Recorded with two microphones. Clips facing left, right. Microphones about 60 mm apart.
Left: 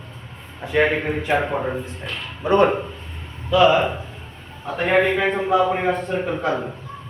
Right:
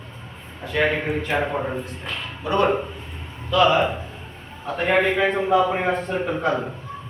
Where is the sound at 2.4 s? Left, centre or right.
Left.